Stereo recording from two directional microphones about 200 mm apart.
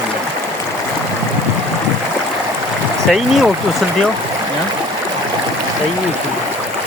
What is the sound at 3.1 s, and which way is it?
Speech, centre (ahead or behind).